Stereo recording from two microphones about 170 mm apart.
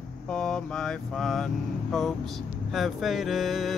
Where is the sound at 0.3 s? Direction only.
5° left (ahead or behind).